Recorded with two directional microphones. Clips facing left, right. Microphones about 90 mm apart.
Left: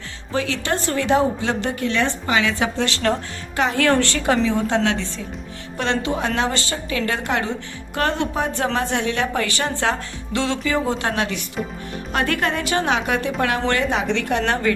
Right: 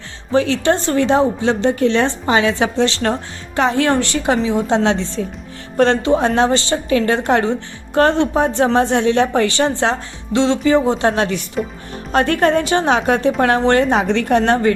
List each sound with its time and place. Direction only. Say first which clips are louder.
0.3 s a woman's voice: right 8 dB; 35° right (ahead or behind)
5.7 s a woman's voice: right 9 dB; 40° right (ahead or behind)
11.6 s speech: right 5 dB; centre (ahead or behind)
12.1 s a woman's voice: right 7 dB; 35° right (ahead or behind)